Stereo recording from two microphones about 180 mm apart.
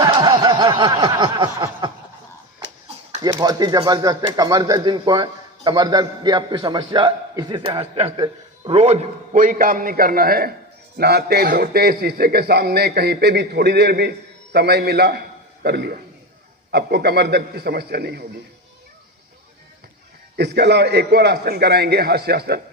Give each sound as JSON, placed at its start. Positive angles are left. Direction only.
{"t": 0.0, "sound": "snicker", "side_deg": -25}
{"t": 3.2, "sound": "a man's voice", "side_deg": -25}
{"t": 20.3, "sound": "a man's voice", "side_deg": -70}